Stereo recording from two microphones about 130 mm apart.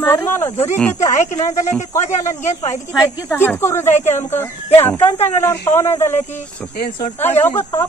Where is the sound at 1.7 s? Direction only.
20° left (ahead or behind).